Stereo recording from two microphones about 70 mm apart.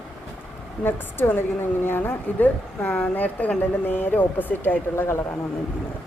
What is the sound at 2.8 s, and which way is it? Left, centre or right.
A woman's voice, centre.